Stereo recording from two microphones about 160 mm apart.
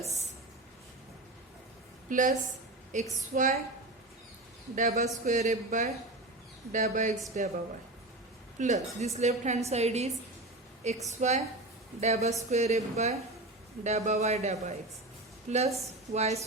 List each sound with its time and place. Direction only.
2.0 s a woman's voice: 55° right (ahead or behind)
4.7 s a woman's voice: 50° right (ahead or behind)
8.5 s a woman's voice: 45° right (ahead or behind)
11.1 s a woman's voice: 45° right (ahead or behind)